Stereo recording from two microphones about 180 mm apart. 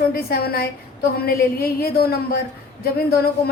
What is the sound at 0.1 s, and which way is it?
A woman's voice, 55° left (ahead or behind).